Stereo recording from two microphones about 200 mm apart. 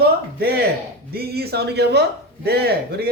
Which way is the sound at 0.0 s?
50° right (ahead or behind).